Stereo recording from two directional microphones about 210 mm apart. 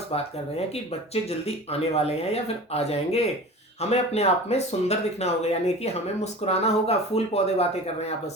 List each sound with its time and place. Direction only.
1.1 s speech: 30° left (ahead or behind)